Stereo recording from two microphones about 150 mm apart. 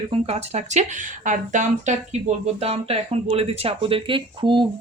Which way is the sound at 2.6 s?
40° right (ahead or behind).